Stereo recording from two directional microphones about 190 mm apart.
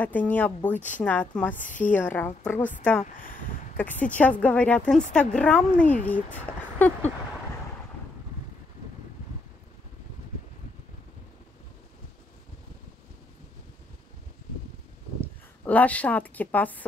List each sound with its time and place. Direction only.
0.0 s a woman's voice: 10° left (ahead or behind)
3.0 s speech: 45° left (ahead or behind)
4.2 s a woman's voice: 5° left (ahead or behind)
15.1 s a woman's voice: 10° left (ahead or behind)